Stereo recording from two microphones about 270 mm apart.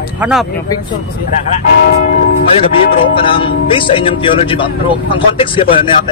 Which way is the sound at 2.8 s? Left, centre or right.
Centre.